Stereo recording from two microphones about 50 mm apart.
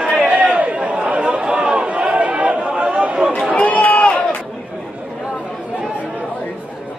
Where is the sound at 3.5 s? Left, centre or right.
Left.